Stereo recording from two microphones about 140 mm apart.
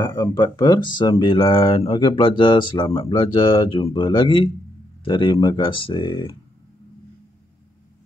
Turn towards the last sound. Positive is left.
turn(degrees=35)  # may be behind; listen again after turning